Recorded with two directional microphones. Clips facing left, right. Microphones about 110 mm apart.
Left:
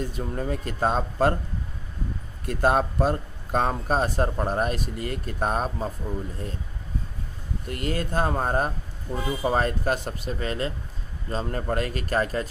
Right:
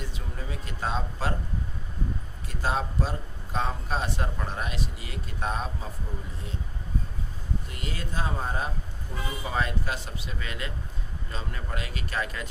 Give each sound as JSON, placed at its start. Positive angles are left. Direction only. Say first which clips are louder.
{"t": 0.0, "sound": "speech", "louder": "left 9 dB", "side_deg": 50}
{"t": 2.4, "sound": "speech", "louder": "left 8 dB", "side_deg": 55}
{"t": 7.6, "sound": "speech", "louder": "left 8 dB", "side_deg": 50}